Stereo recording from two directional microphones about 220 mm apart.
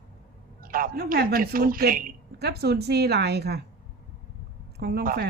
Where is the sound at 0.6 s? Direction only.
40° right (ahead or behind).